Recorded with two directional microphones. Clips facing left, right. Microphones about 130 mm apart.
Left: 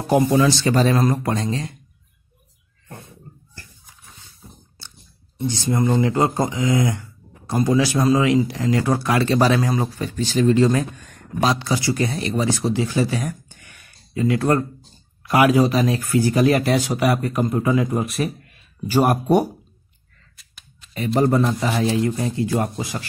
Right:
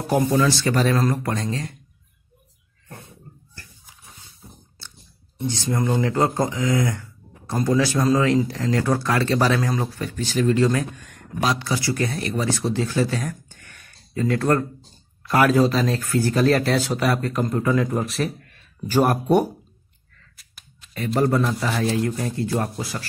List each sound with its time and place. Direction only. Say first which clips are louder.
0.1 s speech: left 3 dB; 20° left (ahead or behind)
5.5 s speech: left 3 dB; 10° left (ahead or behind)
20.3 s a sound: left 2 dB; centre (ahead or behind)
21.2 s speech: left 2 dB; 20° left (ahead or behind)
21.9 s speech: left 3 dB; 10° left (ahead or behind)
22.6 s speech: left 2 dB; 20° left (ahead or behind)